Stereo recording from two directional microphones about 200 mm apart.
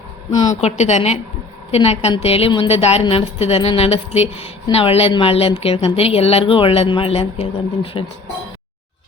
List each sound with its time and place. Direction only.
0.3 s a woman's voice: 35° left (ahead or behind)